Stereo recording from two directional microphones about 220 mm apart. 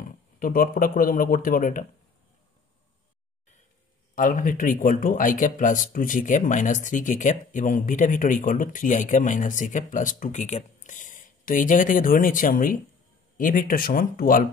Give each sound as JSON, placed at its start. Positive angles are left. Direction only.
{"t": 0.4, "sound": "speech", "side_deg": 40}
{"t": 4.1, "sound": "speech", "side_deg": 35}